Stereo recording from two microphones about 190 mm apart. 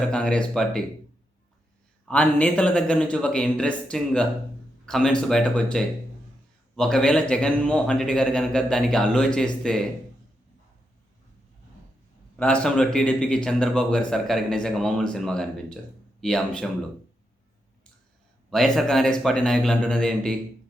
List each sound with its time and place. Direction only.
0.0 s speech: 5° left (ahead or behind)
2.0 s speech: 5° left (ahead or behind)
12.4 s speech: 5° left (ahead or behind)
18.5 s speech: centre (ahead or behind)